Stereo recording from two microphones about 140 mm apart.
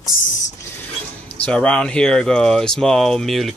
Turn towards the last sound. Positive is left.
turn(degrees=0)  # may be behind; listen again after turning